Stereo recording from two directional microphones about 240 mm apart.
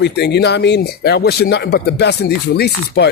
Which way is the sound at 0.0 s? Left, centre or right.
Left.